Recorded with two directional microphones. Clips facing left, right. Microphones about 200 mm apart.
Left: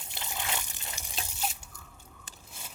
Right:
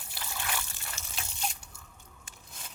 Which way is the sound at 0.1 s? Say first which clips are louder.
Left 1 dB; 20° left (ahead or behind).